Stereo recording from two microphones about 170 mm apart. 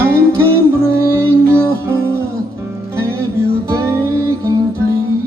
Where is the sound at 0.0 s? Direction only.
15° right (ahead or behind).